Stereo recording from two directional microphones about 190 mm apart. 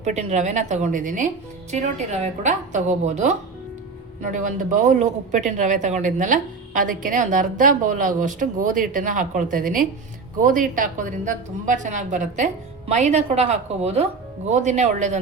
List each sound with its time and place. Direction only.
0.0 s speech: 35° right (ahead or behind)
2.4 s speech: 40° right (ahead or behind)